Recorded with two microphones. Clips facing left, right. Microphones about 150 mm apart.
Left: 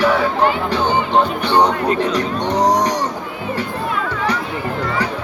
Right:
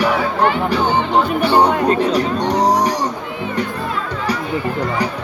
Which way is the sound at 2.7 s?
10° right (ahead or behind).